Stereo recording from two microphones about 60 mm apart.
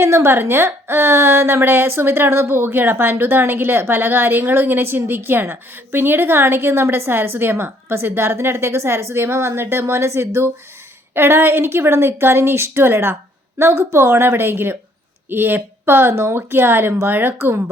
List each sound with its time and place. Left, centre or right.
0.0 s a woman's voice: right